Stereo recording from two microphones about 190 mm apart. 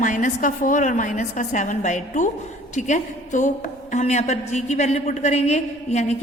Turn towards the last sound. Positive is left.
turn(degrees=35)  # may be behind; listen again after turning